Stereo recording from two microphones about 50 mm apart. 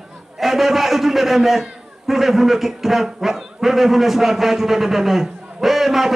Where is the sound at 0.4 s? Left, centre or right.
Centre.